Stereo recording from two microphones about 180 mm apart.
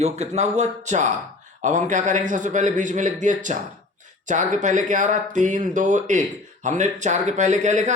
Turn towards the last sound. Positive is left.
turn(degrees=-40)  # may be behind; listen again after turning